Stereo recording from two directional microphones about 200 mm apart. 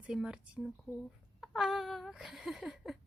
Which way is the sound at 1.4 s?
Centre (ahead or behind).